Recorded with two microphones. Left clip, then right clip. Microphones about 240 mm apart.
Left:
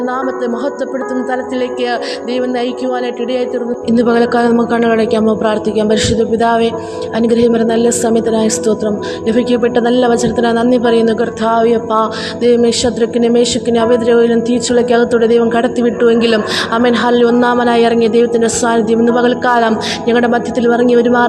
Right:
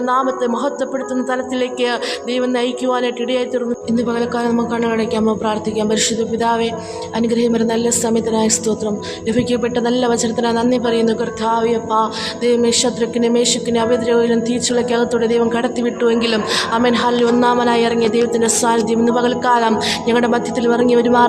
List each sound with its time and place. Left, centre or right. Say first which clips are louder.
3.8 s a woman's voice: left 8 dB; left